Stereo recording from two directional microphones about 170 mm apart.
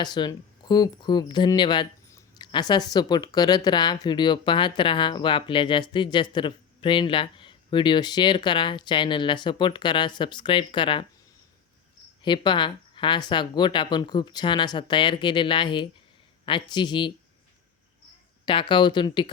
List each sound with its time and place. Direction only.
0.0 s speech: 25° left (ahead or behind)
12.2 s speech: 25° left (ahead or behind)
18.4 s speech: 30° left (ahead or behind)